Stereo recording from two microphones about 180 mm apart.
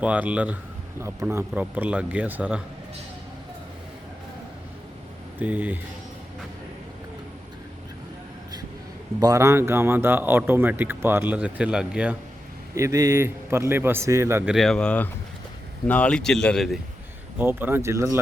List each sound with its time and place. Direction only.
0.0 s speech: 10° right (ahead or behind)
5.4 s speech: 10° right (ahead or behind)
9.2 s speech: 15° right (ahead or behind)
12.7 s speech: 15° right (ahead or behind)
14.5 s speech: centre (ahead or behind)
17.3 s speech: 10° right (ahead or behind)